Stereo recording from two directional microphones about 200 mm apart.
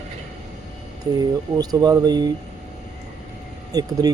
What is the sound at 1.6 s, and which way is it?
Speech, 20° right (ahead or behind).